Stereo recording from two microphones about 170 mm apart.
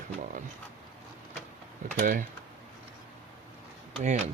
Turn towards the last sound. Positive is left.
turn(degrees=-40)  # may be behind; listen again after turning